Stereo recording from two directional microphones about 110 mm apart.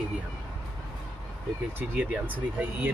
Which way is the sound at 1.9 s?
15° right (ahead or behind).